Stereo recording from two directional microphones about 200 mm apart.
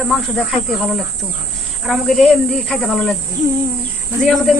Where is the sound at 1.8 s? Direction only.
Centre (ahead or behind).